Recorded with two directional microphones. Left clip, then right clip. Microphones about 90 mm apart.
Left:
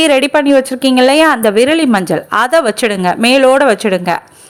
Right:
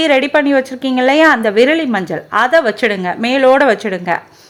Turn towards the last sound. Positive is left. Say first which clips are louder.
# left 3 dB
turn(degrees=30)  # may be behind; listen again after turning